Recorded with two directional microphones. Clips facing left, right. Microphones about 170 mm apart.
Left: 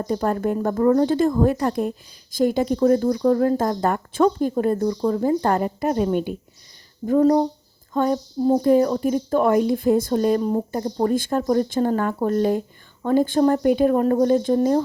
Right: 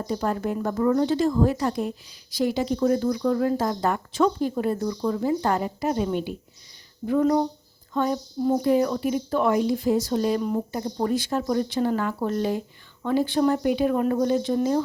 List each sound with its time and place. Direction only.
0.1 s speech: 45° left (ahead or behind)
7.0 s speech: 40° left (ahead or behind)